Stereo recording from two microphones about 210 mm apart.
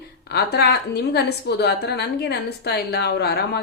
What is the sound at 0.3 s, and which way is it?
A woman's voice, 50° left (ahead or behind).